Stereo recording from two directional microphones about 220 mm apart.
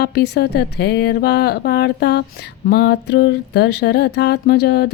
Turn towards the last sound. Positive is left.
turn(degrees=50)  # may be behind; listen again after turning